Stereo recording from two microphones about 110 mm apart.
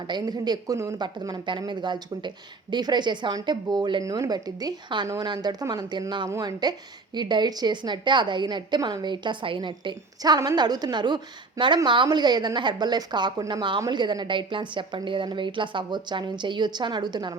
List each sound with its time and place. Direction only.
0.1 s a woman's voice: 40° right (ahead or behind)